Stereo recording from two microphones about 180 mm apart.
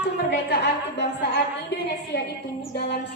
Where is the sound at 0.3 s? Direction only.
70° left (ahead or behind).